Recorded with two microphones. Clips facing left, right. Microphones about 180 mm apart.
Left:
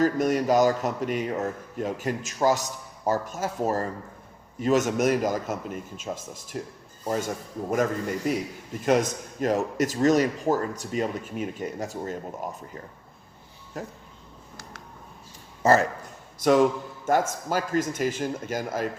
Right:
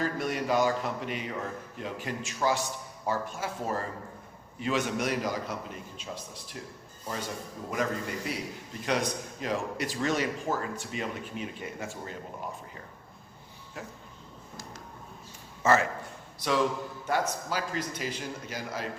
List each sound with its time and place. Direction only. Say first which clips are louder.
0.0 s a man's voice: left 8 dB; 40° left (ahead or behind)
8.3 s a man's voice: left 8 dB; 45° left (ahead or behind)
14.5 s a sound: right 1 dB; 65° left (ahead or behind)
15.6 s a man's voice: left 4 dB; 40° left (ahead or behind)
16.4 s speech: left 8 dB; 50° left (ahead or behind)